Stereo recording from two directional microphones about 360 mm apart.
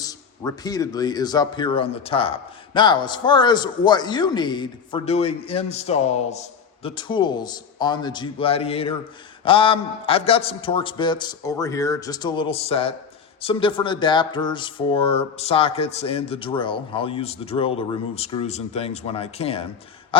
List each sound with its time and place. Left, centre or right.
0.0 s speech: centre